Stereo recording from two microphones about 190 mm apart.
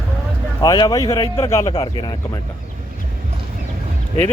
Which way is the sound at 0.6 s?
20° left (ahead or behind).